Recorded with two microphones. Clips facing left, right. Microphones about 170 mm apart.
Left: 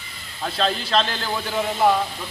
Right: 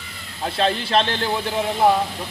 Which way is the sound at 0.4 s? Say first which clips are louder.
Right 2 dB; 25° right (ahead or behind).